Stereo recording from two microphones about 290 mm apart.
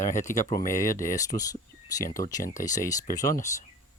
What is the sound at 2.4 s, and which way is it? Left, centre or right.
Speech, left.